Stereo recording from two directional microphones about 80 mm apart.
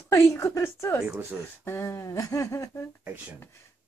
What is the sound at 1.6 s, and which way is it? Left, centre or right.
Speech, left.